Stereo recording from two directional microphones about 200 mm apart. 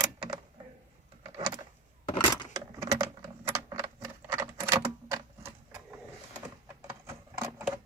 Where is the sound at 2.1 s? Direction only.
20° left (ahead or behind).